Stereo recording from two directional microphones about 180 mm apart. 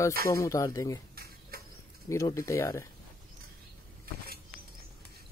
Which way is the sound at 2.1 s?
15° left (ahead or behind).